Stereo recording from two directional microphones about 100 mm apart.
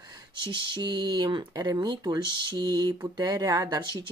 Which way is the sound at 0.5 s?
50° right (ahead or behind).